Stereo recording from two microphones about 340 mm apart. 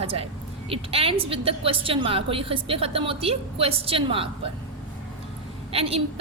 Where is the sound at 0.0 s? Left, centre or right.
Centre.